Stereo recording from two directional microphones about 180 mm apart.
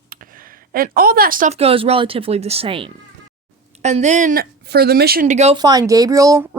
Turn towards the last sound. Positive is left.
turn(degrees=-15)  # may be behind; listen again after turning